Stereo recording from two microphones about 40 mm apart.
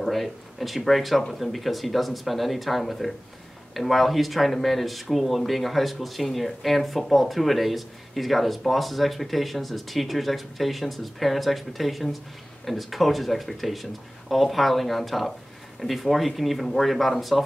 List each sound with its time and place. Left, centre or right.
0.0 s speech: centre